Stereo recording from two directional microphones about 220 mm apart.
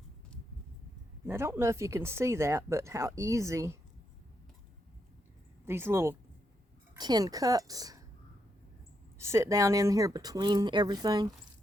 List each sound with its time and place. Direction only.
1.2 s speech: 10° right (ahead or behind)
5.6 s speech: 10° right (ahead or behind)
9.1 s speech: 15° right (ahead or behind)